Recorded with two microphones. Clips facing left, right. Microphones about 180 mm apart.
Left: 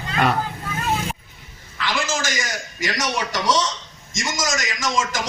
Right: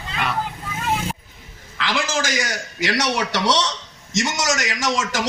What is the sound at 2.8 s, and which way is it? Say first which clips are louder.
A man's voice: right 3 dB; 70° right (ahead or behind).